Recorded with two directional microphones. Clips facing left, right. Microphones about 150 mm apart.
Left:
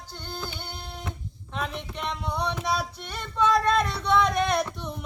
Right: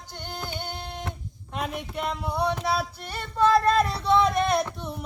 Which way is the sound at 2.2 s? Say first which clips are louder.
Right 3 dB; 5° right (ahead or behind).